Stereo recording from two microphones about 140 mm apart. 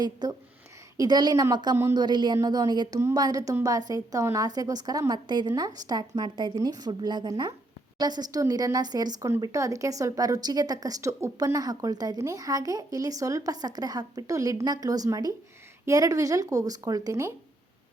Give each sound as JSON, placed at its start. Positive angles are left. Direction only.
{"t": 0.0, "sound": "speech", "side_deg": -30}